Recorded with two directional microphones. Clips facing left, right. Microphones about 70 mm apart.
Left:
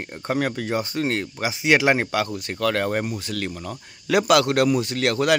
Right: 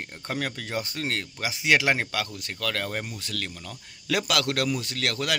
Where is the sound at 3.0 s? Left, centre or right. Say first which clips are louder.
Left 7 dB; centre.